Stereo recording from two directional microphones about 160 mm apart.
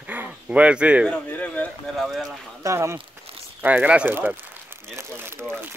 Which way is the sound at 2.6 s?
15° right (ahead or behind).